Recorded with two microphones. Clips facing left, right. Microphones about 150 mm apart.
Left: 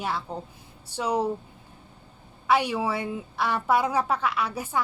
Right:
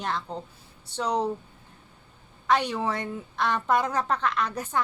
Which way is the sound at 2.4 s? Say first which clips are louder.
Left 1 dB; 10° left (ahead or behind).